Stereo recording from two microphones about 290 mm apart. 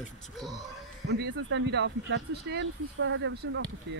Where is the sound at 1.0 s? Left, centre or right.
Right.